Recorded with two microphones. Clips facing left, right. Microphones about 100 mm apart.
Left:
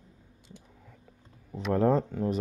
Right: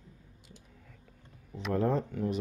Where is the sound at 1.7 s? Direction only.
35° left (ahead or behind).